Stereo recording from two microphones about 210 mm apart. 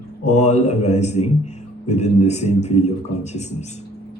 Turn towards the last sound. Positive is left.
turn(degrees=30)  # may be behind; listen again after turning